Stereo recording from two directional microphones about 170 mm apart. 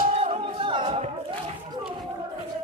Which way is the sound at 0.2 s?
35° right (ahead or behind).